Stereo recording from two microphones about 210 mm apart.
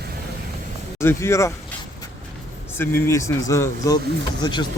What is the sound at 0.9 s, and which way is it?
Speech, 15° left (ahead or behind).